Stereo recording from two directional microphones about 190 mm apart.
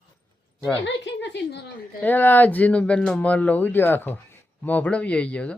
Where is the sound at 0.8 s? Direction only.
70° left (ahead or behind).